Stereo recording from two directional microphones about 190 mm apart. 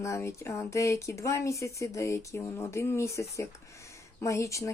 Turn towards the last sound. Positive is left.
turn(degrees=15)  # may be behind; listen again after turning